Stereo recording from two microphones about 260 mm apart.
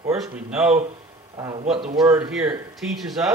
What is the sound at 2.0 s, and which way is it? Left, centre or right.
A man's voice, centre.